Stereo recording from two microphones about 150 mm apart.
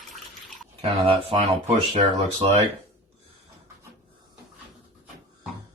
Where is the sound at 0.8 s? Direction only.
40° right (ahead or behind).